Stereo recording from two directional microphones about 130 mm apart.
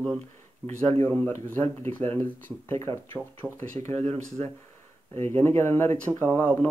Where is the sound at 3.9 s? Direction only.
55° right (ahead or behind).